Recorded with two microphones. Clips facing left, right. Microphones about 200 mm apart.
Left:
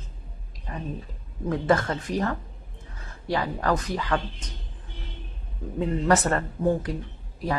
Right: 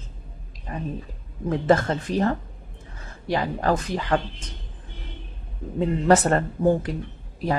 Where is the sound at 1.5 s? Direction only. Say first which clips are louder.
Right 3 dB; 25° right (ahead or behind).